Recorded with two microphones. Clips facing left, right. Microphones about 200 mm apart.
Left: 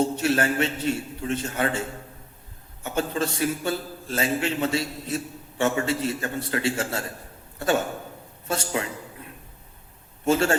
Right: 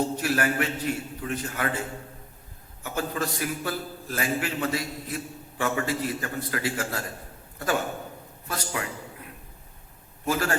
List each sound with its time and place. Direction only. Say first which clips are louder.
0.0 s a man's voice: left 3 dB; 25° left (ahead or behind)
2.8 s a man's voice: left 3 dB; 25° left (ahead or behind)
8.4 s a man's voice: left 5 dB; 25° left (ahead or behind)
10.2 s a man's voice: left 5 dB; 25° left (ahead or behind)